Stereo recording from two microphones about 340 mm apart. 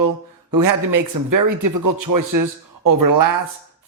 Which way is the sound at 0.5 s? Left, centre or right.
Right.